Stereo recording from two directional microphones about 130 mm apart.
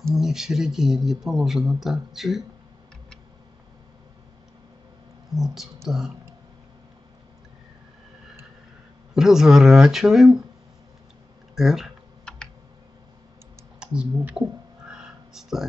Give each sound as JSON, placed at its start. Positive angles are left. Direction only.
{"t": 0.1, "sound": "speech", "side_deg": -5}
{"t": 5.3, "sound": "speech", "side_deg": 0}
{"t": 9.1, "sound": "speech", "side_deg": -5}
{"t": 11.5, "sound": "typing", "side_deg": -5}
{"t": 13.7, "sound": "speech", "side_deg": -5}
{"t": 14.9, "sound": "a sound", "side_deg": -5}